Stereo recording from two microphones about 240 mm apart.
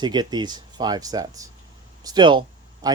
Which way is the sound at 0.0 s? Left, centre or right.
Centre.